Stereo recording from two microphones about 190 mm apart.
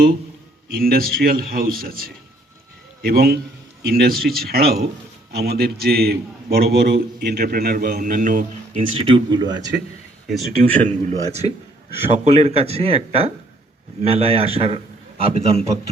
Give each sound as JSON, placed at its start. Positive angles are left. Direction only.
{"t": 0.7, "sound": "a man's voice", "side_deg": -50}
{"t": 9.0, "sound": "speech", "side_deg": -30}
{"t": 10.2, "sound": "speech", "side_deg": 0}
{"t": 10.8, "sound": "speech", "side_deg": -35}